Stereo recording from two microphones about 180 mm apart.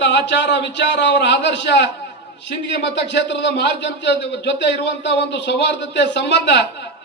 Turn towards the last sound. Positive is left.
turn(degrees=75)  # may be behind; listen again after turning